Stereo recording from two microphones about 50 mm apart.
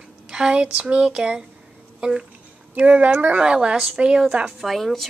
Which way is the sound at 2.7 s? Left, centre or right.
Right.